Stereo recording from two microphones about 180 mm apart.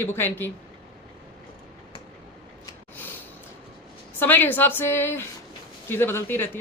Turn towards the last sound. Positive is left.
turn(degrees=10)  # may be behind; listen again after turning